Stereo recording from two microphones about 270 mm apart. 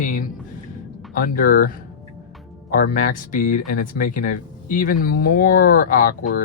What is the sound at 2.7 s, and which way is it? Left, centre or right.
Speech, left.